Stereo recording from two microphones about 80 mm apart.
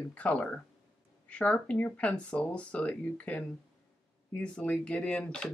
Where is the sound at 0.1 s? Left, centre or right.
Centre.